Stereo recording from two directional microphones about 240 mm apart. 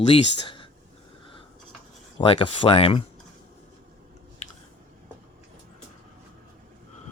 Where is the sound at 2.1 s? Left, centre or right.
Left.